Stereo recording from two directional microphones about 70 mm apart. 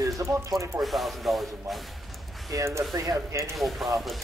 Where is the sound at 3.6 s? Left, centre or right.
Centre.